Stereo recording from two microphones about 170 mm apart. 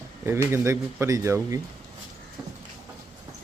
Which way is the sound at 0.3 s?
15° right (ahead or behind).